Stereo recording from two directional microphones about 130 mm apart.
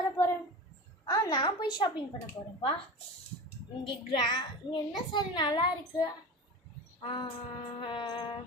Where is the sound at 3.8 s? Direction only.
40° left (ahead or behind).